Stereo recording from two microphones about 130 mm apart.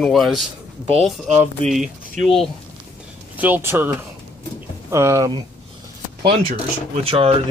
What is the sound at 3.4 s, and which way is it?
Speech, 15° right (ahead or behind).